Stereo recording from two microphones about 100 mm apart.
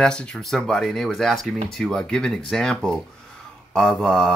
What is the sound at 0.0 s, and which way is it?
Speech, 10° left (ahead or behind).